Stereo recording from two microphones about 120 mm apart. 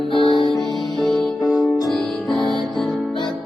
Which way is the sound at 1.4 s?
30° left (ahead or behind).